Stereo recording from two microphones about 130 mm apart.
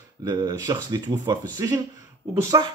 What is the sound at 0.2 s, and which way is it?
A man's voice, 35° right (ahead or behind).